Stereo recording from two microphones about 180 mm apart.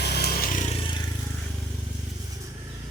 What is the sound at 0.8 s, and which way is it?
Vehicle, 25° left (ahead or behind).